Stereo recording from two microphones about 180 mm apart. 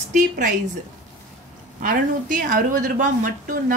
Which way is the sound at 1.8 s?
50° right (ahead or behind).